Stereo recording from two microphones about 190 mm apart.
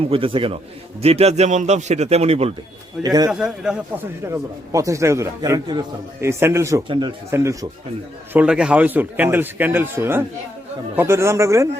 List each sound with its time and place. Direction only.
0.1 s a man's voice: 30° right (ahead or behind)
3.0 s a man's voice: 20° right (ahead or behind)
3.2 s a man's voice: 5° right (ahead or behind)
4.2 s a man's voice: 15° right (ahead or behind)
6.8 s a man's voice: 25° right (ahead or behind)
7.3 s a man's voice: 15° right (ahead or behind)